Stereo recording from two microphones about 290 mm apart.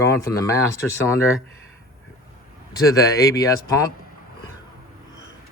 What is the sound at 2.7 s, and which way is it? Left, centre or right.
Speech, centre.